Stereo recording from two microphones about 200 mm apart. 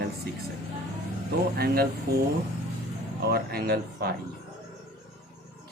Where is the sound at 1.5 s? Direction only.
50° right (ahead or behind).